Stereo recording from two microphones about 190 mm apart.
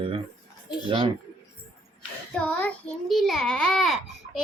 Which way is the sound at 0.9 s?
25° right (ahead or behind).